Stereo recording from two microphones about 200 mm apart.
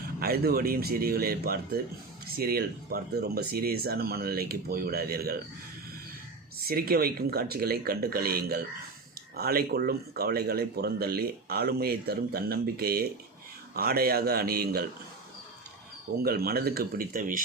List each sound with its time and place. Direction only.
0.2 s speech: 50° right (ahead or behind)
6.7 s speech: 50° right (ahead or behind)
16.2 s speech: 50° right (ahead or behind)